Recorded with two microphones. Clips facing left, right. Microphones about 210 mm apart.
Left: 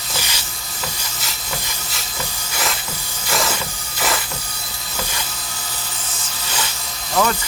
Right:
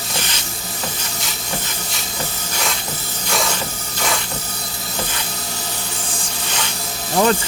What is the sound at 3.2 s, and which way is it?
Hiss, 5° left (ahead or behind).